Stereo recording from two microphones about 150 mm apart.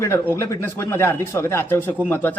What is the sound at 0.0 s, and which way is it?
A man's voice, 20° left (ahead or behind).